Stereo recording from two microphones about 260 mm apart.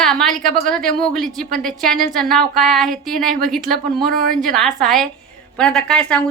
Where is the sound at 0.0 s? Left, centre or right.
Centre.